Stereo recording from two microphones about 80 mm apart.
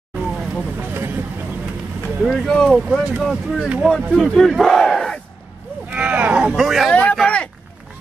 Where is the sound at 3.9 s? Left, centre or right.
Centre.